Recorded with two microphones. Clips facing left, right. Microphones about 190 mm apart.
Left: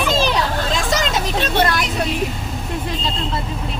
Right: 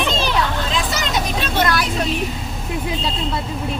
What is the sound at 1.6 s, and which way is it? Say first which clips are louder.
Speech: right 1 dB; 20° left (ahead or behind).